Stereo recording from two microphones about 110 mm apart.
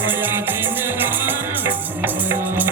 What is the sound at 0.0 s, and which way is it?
Music, 20° right (ahead or behind).